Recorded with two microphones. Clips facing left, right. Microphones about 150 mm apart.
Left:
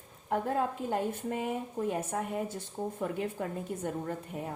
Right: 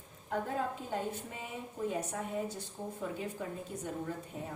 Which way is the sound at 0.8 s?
55° left (ahead or behind).